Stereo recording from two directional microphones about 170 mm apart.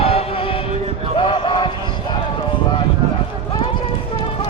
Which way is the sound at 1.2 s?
30° left (ahead or behind).